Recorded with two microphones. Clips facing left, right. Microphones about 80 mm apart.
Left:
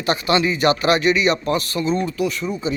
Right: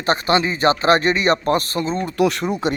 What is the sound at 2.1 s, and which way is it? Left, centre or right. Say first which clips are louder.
Speech: right 4 dB; right.